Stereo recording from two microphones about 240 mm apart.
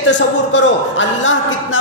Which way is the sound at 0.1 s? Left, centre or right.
Left.